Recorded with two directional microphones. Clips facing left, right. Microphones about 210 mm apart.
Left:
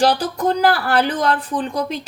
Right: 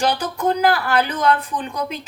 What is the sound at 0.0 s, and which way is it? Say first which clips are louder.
Speech: left 3 dB; 35° left (ahead or behind).